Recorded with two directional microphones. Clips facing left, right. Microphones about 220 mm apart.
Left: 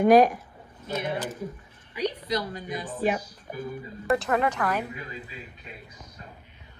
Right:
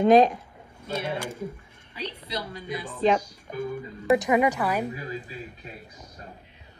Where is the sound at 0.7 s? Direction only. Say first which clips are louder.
Even; 10° right (ahead or behind).